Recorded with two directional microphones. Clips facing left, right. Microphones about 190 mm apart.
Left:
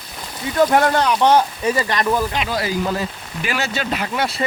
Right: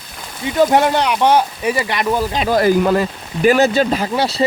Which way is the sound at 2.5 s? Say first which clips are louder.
Right 8 dB; 50° right (ahead or behind).